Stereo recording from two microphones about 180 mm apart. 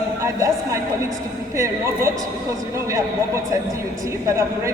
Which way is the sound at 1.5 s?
15° right (ahead or behind).